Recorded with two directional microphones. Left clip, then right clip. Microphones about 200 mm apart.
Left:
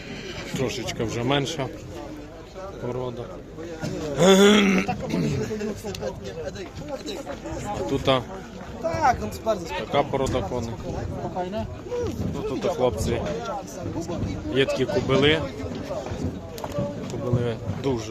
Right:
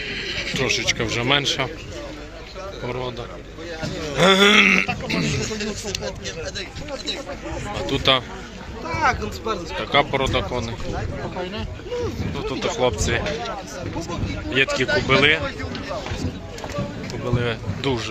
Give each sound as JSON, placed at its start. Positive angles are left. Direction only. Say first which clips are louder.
{"t": 0.1, "sound": "a sound", "louder": "right 6 dB", "side_deg": 60}
{"t": 0.5, "sound": "a man's voice", "louder": "right 7 dB", "side_deg": 15}
{"t": 4.2, "sound": "speech", "louder": "right 3 dB", "side_deg": 20}
{"t": 5.9, "sound": "speech", "louder": "right 3 dB", "side_deg": 40}
{"t": 7.8, "sound": "a man's voice", "louder": "right 4 dB", "side_deg": 15}
{"t": 8.9, "sound": "speech", "louder": "right 1 dB", "side_deg": 60}
{"t": 9.9, "sound": "a man's voice", "louder": "right 4 dB", "side_deg": 10}
{"t": 12.7, "sound": "a man's voice", "louder": "right 5 dB", "side_deg": 10}
{"t": 14.5, "sound": "a man's voice", "louder": "right 3 dB", "side_deg": 20}
{"t": 17.1, "sound": "speech", "louder": "right 6 dB", "side_deg": 15}